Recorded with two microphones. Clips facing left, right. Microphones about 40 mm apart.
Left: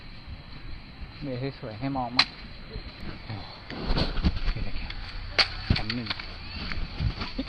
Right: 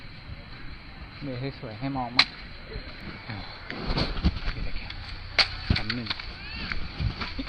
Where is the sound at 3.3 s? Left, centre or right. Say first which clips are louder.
Right 3 dB; right.